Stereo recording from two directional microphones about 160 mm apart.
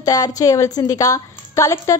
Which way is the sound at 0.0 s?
20° left (ahead or behind).